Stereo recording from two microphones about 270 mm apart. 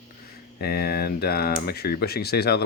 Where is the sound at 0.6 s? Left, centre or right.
Left.